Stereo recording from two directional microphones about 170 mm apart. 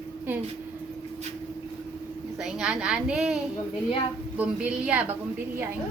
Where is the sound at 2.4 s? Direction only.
5° right (ahead or behind).